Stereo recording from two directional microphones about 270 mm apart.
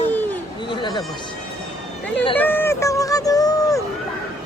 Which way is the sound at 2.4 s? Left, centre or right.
Centre.